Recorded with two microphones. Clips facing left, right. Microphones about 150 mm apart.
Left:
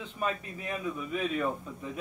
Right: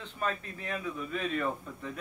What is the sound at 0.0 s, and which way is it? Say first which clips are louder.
A man's voice: left 1 dB; 10° left (ahead or behind).